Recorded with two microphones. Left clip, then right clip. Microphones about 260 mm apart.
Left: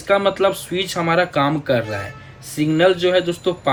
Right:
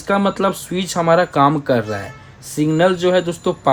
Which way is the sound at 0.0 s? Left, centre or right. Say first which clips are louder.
Left 1 dB; right.